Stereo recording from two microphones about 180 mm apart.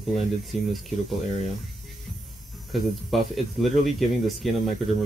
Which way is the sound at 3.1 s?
Centre (ahead or behind).